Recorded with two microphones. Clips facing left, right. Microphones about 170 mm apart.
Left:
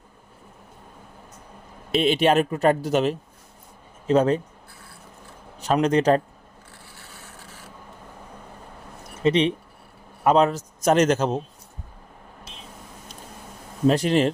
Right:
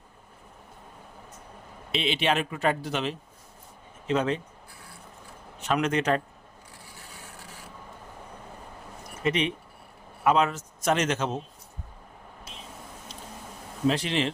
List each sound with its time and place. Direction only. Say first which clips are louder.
1.9 s speech: left 7 dB; 45° left (ahead or behind)
5.5 s a man's voice: left 6 dB; 35° left (ahead or behind)
6.8 s rub: even; 15° right (ahead or behind)
9.2 s a man's voice: left 7 dB; 30° left (ahead or behind)
13.8 s speech: left 7 dB; 45° left (ahead or behind)